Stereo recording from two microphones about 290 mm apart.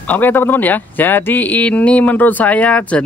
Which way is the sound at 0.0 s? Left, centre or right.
Centre.